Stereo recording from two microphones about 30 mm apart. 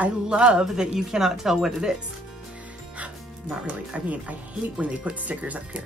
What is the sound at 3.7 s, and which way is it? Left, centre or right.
Speech, right.